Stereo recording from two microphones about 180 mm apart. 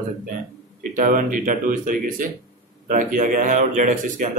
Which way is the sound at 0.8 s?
50° right (ahead or behind).